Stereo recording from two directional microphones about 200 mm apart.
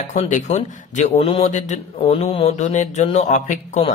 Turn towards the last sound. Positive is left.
turn(degrees=35)  # may be behind; listen again after turning